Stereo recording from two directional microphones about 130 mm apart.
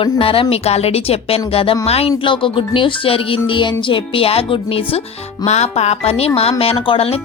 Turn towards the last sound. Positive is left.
turn(degrees=45)  # may be behind; listen again after turning